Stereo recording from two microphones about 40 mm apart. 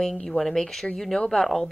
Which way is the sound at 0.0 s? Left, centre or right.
Centre.